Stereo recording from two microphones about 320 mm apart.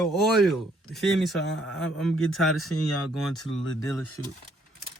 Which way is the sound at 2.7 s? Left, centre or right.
Left.